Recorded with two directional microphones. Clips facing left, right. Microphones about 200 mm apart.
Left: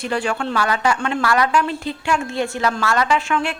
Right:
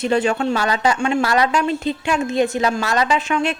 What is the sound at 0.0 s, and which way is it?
A woman's voice, 25° right (ahead or behind).